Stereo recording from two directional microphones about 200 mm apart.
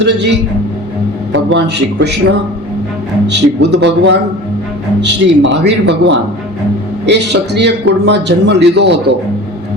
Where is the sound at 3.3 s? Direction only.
60° right (ahead or behind).